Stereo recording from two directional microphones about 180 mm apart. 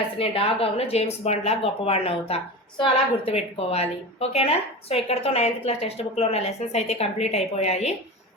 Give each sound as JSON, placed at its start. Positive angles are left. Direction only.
{"t": 0.2, "sound": "a woman's voice", "side_deg": 30}